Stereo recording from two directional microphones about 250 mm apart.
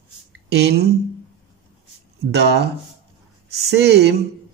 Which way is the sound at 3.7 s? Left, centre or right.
Right.